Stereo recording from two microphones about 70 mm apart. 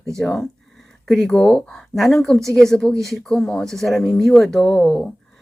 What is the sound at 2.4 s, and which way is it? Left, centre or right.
Speech, right.